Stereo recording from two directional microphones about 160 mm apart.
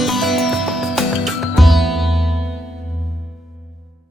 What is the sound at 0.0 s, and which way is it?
Music, centre (ahead or behind).